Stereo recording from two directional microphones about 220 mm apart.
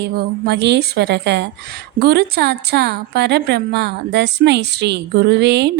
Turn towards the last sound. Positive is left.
turn(degrees=-50)  # may be behind; listen again after turning